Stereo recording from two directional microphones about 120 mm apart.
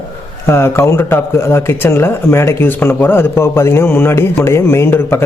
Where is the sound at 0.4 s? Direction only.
20° left (ahead or behind).